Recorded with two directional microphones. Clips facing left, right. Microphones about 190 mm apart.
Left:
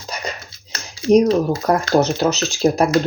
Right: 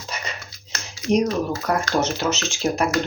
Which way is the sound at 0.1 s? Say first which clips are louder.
Left 5 dB; 35° left (ahead or behind).